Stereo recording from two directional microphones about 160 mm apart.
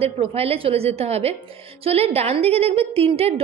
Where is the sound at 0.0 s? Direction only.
40° right (ahead or behind).